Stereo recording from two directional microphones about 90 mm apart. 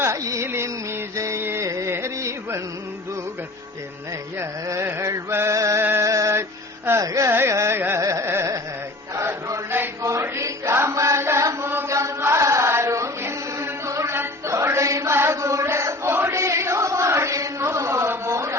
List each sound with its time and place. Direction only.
0.0 s music: 35° right (ahead or behind)
4.4 s chant: 30° right (ahead or behind)
5.8 s a sound: 30° right (ahead or behind)
6.8 s carnatic music: 35° right (ahead or behind)
9.1 s chant: 30° right (ahead or behind)